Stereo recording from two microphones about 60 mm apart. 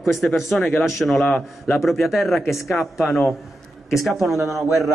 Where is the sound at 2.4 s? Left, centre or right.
Left.